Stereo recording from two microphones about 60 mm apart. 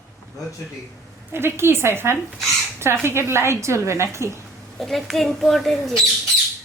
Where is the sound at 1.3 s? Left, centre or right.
Right.